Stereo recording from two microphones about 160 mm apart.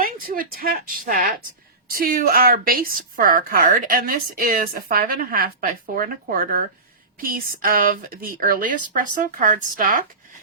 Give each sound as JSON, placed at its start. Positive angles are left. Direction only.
{"t": 0.0, "sound": "a woman's voice", "side_deg": -60}